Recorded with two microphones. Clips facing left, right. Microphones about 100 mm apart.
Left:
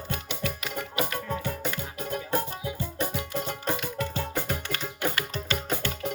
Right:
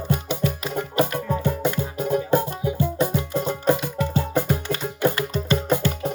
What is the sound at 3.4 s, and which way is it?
Music, 15° right (ahead or behind).